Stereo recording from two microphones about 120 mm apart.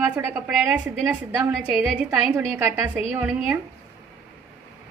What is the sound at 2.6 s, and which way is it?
Speech, 20° right (ahead or behind).